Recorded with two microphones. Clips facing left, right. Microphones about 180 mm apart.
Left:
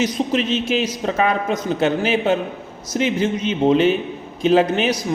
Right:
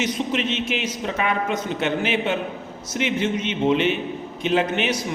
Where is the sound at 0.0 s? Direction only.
35° left (ahead or behind).